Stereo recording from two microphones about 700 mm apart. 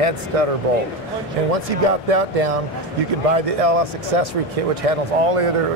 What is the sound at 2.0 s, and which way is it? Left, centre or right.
Speech, right.